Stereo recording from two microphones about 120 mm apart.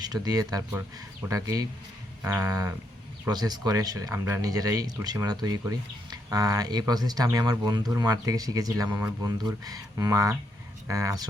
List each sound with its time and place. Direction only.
0.0 s speech: 30° right (ahead or behind)